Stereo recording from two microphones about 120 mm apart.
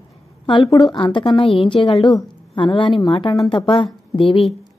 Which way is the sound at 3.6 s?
45° left (ahead or behind).